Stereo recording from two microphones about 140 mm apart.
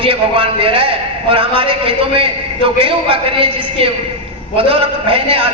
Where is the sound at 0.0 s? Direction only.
40° right (ahead or behind).